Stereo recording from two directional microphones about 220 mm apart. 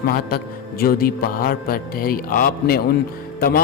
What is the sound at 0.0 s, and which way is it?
A man's voice, 40° left (ahead or behind).